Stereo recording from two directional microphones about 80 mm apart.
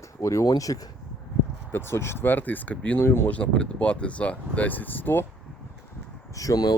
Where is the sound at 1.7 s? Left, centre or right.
Left.